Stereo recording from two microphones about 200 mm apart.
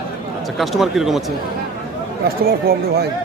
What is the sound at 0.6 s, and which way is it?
Speech, centre (ahead or behind).